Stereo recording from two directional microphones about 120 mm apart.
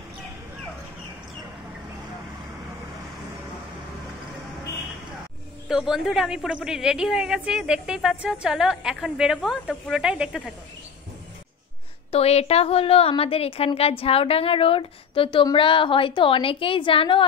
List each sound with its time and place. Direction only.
5.7 s a woman's voice: 5° right (ahead or behind)
12.1 s a woman's voice: 60° left (ahead or behind)